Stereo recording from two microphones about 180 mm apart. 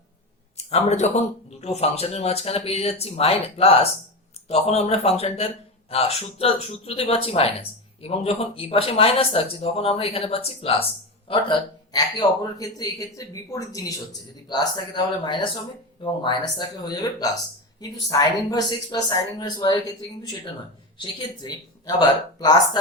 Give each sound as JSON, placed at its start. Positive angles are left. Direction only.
{"t": 0.5, "sound": "a man's voice", "side_deg": 35}
{"t": 21.0, "sound": "speech", "side_deg": 25}